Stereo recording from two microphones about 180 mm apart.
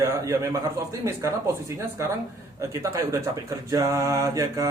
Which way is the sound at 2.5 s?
15° right (ahead or behind).